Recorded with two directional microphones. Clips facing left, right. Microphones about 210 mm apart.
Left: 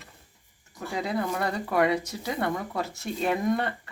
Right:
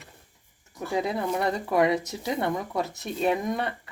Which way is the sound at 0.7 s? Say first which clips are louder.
Right 2 dB; 20° right (ahead or behind).